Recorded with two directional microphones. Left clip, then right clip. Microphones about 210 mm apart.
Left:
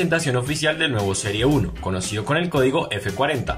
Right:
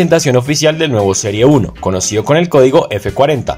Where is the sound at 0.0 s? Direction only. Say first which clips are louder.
Right 11 dB; 25° right (ahead or behind).